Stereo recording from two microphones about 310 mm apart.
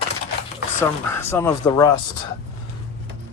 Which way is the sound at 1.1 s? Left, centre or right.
Centre.